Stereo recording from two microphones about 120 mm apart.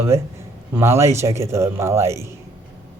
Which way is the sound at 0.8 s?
25° right (ahead or behind).